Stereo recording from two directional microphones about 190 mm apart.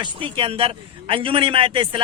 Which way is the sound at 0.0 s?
25° right (ahead or behind).